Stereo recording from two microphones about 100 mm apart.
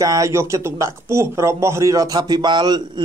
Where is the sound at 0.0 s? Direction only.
35° right (ahead or behind).